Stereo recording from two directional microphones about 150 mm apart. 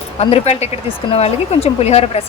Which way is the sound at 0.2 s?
45° left (ahead or behind).